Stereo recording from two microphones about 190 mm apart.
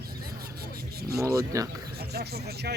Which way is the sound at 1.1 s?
15° right (ahead or behind).